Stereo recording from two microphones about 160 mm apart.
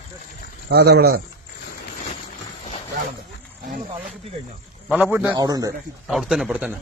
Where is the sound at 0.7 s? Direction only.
85° right.